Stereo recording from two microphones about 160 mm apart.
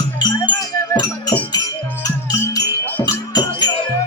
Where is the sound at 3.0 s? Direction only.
30° left (ahead or behind).